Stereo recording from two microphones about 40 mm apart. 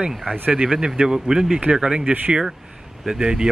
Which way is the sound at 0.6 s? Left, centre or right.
Centre.